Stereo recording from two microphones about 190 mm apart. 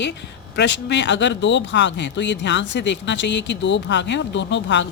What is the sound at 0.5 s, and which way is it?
A woman's voice, 65° left (ahead or behind).